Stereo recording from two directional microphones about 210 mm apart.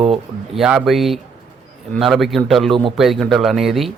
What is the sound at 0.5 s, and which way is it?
Speech, centre (ahead or behind).